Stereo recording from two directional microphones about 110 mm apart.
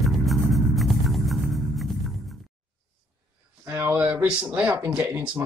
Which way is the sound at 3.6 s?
20° right (ahead or behind).